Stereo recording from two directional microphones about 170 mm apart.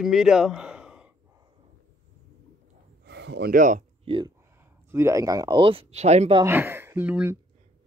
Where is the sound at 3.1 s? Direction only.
85° right.